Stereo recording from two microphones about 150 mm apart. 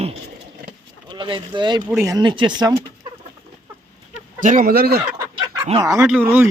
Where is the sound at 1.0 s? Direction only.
30° right (ahead or behind).